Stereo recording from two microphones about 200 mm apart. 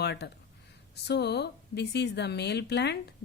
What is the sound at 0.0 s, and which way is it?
Speech, 55° left (ahead or behind).